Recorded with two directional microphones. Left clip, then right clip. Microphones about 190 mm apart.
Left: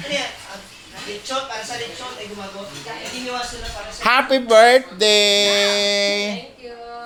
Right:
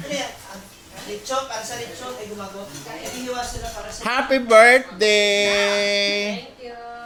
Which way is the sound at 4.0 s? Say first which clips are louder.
Left 5 dB; 10° left (ahead or behind).